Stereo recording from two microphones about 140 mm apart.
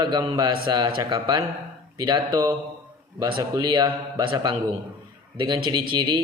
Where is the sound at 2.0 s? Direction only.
30° right (ahead or behind).